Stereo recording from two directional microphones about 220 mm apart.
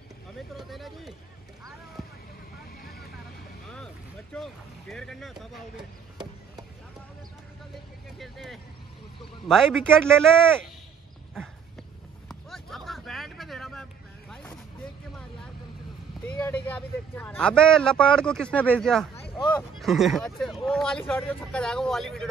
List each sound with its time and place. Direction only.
0.6 s a sound: centre (ahead or behind)
2.8 s vehicle: 45° left (ahead or behind)
3.6 s vehicle: 5° left (ahead or behind)
8.2 s speech: centre (ahead or behind)
12.3 s vehicle: centre (ahead or behind)
16.3 s speech: 10° left (ahead or behind)